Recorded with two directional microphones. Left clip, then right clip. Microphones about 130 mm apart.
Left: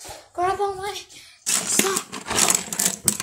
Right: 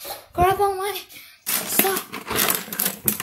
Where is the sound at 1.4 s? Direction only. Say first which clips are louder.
Left 1 dB; 65° left (ahead or behind).